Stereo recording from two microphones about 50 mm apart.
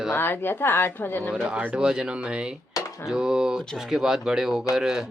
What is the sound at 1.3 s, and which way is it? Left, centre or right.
Speech, centre.